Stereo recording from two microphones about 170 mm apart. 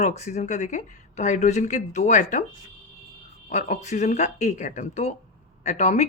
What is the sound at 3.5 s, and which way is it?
Speech, 45° left (ahead or behind).